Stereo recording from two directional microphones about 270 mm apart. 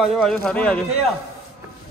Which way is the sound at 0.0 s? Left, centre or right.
Centre.